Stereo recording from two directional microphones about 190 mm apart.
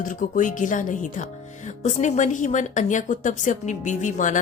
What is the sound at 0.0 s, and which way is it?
A woman's voice, 45° left (ahead or behind).